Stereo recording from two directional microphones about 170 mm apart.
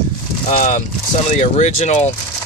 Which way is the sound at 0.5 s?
50° left (ahead or behind).